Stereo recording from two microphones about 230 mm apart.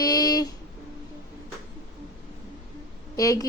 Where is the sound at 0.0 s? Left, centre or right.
Centre.